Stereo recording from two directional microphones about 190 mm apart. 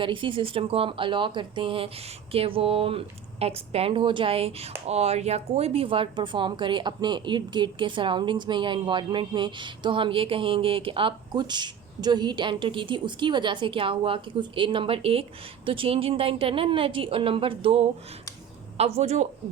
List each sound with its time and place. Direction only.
0.0 s a woman's voice: 25° right (ahead or behind)